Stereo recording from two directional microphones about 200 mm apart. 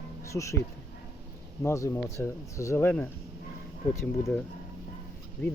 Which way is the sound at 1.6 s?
15° left (ahead or behind).